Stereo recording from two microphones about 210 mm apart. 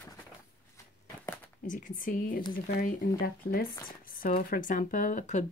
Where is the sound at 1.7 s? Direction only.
40° left (ahead or behind).